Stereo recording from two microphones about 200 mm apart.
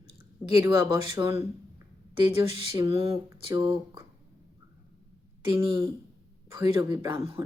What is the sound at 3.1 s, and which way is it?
Speech, 15° right (ahead or behind).